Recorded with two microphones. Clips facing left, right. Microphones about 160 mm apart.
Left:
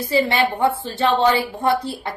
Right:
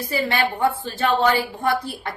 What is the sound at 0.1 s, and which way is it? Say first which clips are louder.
A woman's voice: left 4 dB; 20° left (ahead or behind).